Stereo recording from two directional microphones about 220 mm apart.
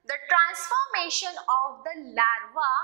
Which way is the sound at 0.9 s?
10° right (ahead or behind).